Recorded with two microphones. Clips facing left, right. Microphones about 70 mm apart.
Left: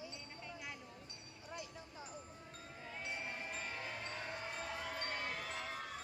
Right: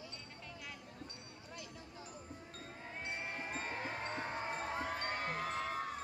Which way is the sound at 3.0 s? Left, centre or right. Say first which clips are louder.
Right 2 dB; right.